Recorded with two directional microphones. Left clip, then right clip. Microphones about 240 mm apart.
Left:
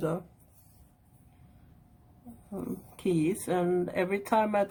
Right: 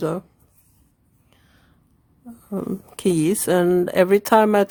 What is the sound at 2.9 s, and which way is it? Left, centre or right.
Speech, right.